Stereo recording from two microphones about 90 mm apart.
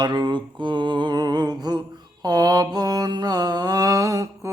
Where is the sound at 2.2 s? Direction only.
50° right (ahead or behind).